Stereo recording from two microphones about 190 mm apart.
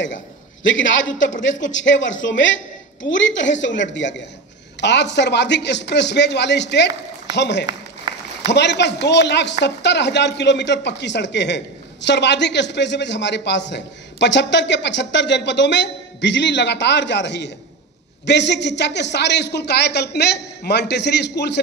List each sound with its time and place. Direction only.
0.7 s a man's voice: 80° left; by 21.5 s 60° left (ahead or behind)